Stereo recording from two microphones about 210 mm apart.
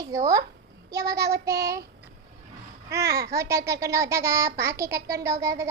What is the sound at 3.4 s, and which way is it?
A child's voice, 15° right (ahead or behind).